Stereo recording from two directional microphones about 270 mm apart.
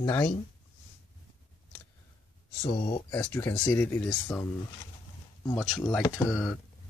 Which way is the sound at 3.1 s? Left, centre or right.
Centre.